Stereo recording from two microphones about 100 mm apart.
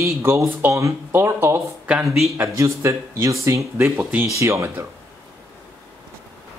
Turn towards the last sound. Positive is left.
turn(degrees=-30)  # may be behind; listen again after turning